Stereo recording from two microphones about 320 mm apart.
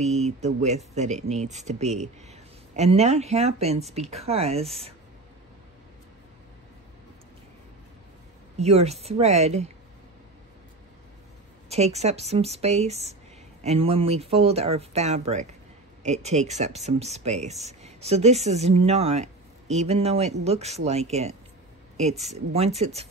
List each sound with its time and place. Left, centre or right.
0.0 s speech: right
8.5 s speech: centre
11.7 s speech: centre